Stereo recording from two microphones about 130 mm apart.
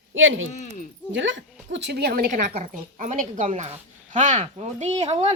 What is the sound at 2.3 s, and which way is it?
A woman's voice, 75° right (ahead or behind).